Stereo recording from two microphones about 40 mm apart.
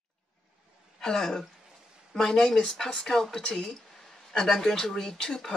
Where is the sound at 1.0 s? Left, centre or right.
Centre.